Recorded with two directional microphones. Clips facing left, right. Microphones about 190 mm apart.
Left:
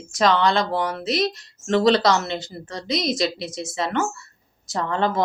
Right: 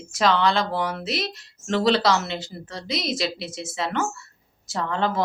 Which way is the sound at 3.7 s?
Centre (ahead or behind).